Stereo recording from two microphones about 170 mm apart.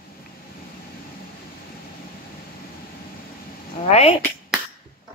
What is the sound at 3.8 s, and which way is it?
Speech, 35° left (ahead or behind).